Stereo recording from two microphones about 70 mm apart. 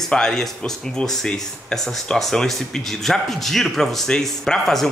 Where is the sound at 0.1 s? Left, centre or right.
Centre.